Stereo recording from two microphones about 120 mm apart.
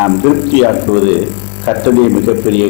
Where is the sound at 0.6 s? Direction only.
20° left (ahead or behind).